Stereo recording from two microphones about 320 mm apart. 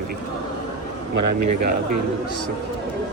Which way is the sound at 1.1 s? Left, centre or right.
Right.